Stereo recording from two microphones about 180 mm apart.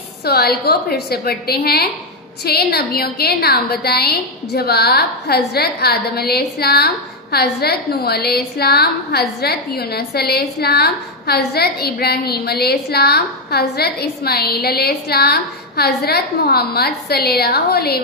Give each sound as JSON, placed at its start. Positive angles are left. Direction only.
{"t": 0.2, "sound": "a woman's voice", "side_deg": 60}